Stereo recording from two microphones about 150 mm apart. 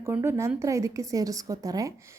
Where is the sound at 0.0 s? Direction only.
15° right (ahead or behind).